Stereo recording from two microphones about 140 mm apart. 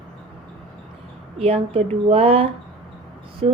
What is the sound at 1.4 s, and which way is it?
A woman's voice, 45° right (ahead or behind).